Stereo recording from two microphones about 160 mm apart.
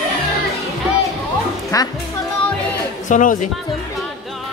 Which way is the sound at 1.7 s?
20° left (ahead or behind).